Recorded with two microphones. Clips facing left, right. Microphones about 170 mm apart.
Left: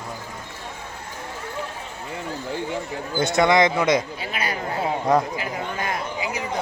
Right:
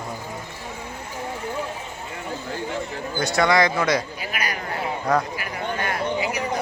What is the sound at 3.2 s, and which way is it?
Speech, 20° left (ahead or behind).